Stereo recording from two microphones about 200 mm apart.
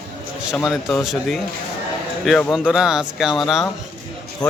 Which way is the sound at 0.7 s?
Centre (ahead or behind).